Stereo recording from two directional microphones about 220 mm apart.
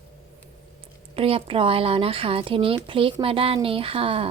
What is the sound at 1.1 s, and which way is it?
A woman's voice, 25° right (ahead or behind).